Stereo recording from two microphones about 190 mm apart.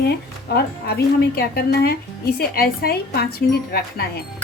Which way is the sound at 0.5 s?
55° left (ahead or behind).